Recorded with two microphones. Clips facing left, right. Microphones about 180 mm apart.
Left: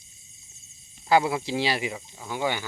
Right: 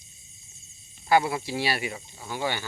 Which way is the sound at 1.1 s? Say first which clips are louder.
Left 1 dB; 20° left (ahead or behind).